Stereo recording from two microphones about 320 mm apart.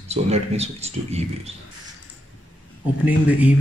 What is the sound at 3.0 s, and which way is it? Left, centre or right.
Speech, centre.